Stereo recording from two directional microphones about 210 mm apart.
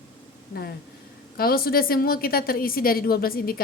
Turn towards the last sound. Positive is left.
turn(degrees=45)  # may be behind; listen again after turning